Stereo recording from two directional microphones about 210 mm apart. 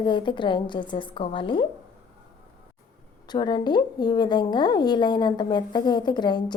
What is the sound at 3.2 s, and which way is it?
A woman's voice, 20° left (ahead or behind).